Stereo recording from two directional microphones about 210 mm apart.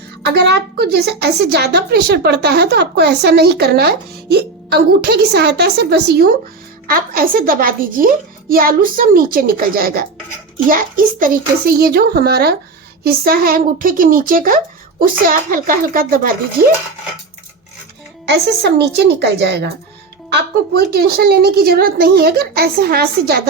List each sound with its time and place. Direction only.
0.3 s a woman's voice: 50° right (ahead or behind)
18.3 s a woman's voice: 55° right (ahead or behind)